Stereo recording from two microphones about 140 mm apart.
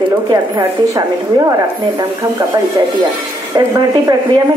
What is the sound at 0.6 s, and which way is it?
Speech, 25° right (ahead or behind).